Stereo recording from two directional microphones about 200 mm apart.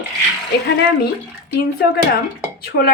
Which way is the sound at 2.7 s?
50° left (ahead or behind).